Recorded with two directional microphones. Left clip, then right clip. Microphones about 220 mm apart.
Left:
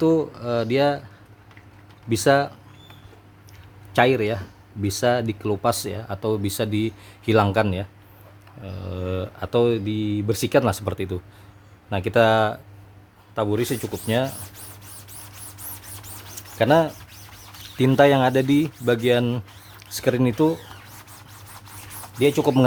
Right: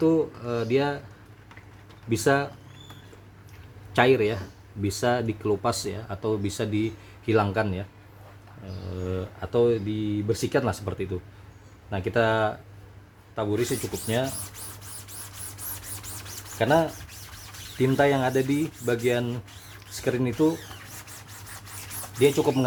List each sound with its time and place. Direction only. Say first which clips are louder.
0.0 s speech: left 3 dB; 40° left (ahead or behind)
2.0 s speech: left 5 dB; 35° left (ahead or behind)
3.9 s speech: left 2 dB; 35° left (ahead or behind); by 14.3 s 50° left (ahead or behind)
16.6 s speech: left 4 dB; 45° left (ahead or behind)
22.2 s speech: left 2 dB; 40° left (ahead or behind)